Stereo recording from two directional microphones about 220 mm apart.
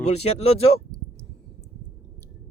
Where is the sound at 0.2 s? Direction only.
30° left (ahead or behind).